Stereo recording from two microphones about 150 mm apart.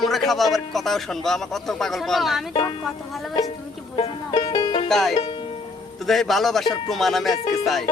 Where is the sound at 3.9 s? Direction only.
35° left (ahead or behind).